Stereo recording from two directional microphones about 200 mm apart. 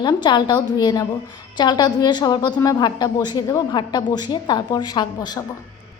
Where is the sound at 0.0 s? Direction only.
20° left (ahead or behind).